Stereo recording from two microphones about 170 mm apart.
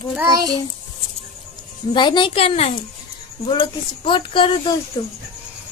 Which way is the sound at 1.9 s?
25° left (ahead or behind).